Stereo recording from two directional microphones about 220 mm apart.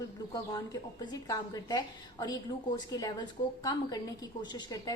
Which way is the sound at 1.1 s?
15° left (ahead or behind).